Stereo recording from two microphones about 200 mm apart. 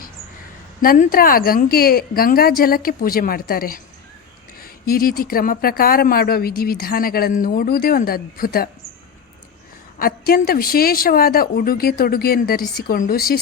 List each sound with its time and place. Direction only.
0.8 s speech: 45° left (ahead or behind)
10.0 s speech: 50° left (ahead or behind)